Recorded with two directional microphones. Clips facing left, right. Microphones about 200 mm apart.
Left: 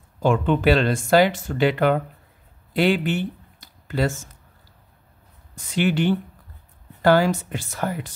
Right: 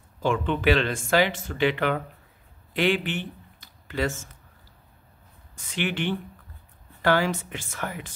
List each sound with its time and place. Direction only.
0.2 s speech: 45° left (ahead or behind)
2.7 s a sound: 40° left (ahead or behind)
5.8 s speech: 40° left (ahead or behind)